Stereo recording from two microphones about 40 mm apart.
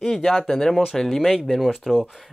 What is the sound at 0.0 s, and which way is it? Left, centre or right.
Speech, centre.